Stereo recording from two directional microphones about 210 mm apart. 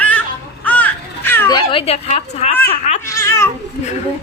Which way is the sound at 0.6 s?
5° left (ahead or behind).